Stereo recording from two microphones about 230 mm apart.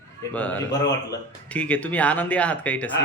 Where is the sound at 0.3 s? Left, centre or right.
Centre.